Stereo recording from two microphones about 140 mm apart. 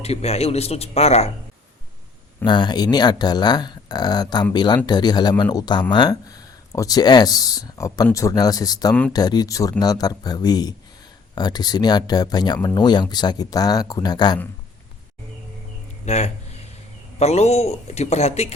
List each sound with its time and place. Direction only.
0.0 s a man's voice: 50° left (ahead or behind)
2.4 s a man's voice: 35° left (ahead or behind)
16.0 s a man's voice: 50° left (ahead or behind)